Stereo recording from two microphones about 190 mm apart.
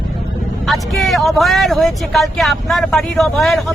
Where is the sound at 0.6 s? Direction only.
Centre (ahead or behind).